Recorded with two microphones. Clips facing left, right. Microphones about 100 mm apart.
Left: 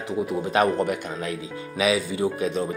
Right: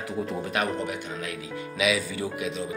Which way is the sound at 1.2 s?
35° left (ahead or behind).